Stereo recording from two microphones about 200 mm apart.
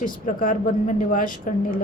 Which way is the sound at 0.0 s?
40° left (ahead or behind).